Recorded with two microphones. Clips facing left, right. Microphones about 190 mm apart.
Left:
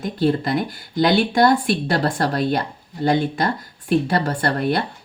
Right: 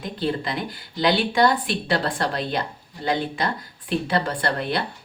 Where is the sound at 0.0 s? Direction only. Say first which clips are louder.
Left 6 dB; 45° left (ahead or behind).